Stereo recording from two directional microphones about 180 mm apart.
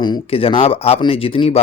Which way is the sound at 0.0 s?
30° left (ahead or behind).